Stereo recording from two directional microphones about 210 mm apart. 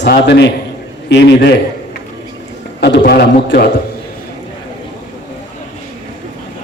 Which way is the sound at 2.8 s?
50° left (ahead or behind).